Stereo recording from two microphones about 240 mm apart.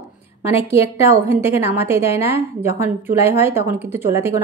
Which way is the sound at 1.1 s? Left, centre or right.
Centre.